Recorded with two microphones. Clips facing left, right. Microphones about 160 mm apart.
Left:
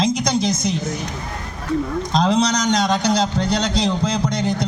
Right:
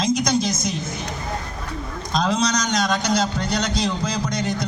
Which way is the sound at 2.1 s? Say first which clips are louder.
Left 3 dB; 25° left (ahead or behind).